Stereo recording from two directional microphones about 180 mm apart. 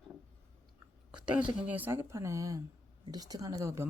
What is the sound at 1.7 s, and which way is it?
Speech, 10° right (ahead or behind).